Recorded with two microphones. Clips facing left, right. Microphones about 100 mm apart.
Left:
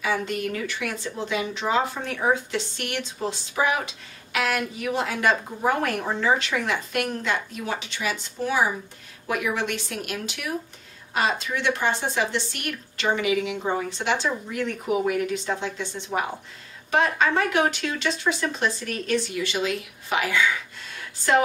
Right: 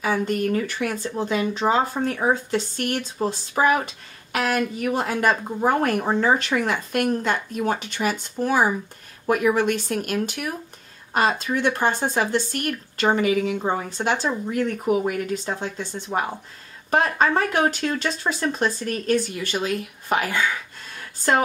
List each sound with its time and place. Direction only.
0.0 s speech: 40° right (ahead or behind)